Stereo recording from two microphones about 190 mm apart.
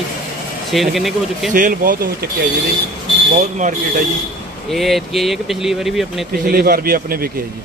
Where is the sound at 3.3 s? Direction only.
40° right (ahead or behind).